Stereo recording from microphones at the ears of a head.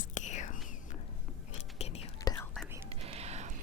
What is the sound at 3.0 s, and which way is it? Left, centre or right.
Music, right.